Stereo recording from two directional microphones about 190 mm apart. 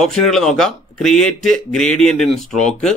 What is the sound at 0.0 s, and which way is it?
Speech, centre (ahead or behind).